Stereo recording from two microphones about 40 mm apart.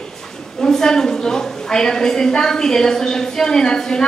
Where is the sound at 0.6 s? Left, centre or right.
Centre.